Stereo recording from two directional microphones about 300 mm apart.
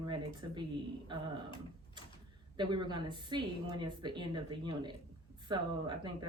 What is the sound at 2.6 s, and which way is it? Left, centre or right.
A woman's voice, centre.